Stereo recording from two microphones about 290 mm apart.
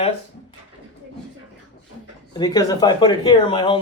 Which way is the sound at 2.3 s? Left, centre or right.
Centre.